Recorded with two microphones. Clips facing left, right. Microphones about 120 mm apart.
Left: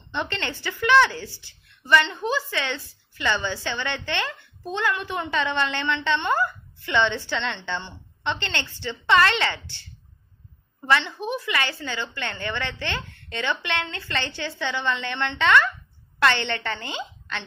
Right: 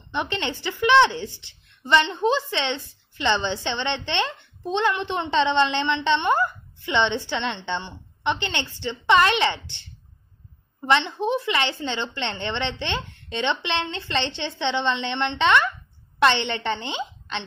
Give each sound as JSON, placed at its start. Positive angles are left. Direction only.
{"t": 0.1, "sound": "a woman's voice", "side_deg": -15}